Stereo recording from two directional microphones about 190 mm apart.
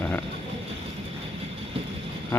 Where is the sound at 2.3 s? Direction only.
10° left (ahead or behind).